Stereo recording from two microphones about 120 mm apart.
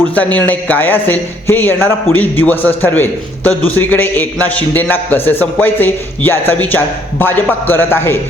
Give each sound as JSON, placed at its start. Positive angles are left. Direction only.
{"t": 0.1, "sound": "a man's voice", "side_deg": 15}